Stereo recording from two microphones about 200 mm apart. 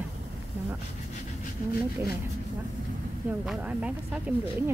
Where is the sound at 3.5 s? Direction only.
5° right (ahead or behind).